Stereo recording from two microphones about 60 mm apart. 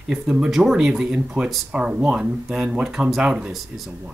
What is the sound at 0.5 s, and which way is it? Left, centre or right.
Speech, centre.